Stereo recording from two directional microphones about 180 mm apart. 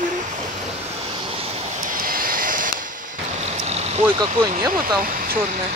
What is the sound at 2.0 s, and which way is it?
Vehicle, 50° right (ahead or behind).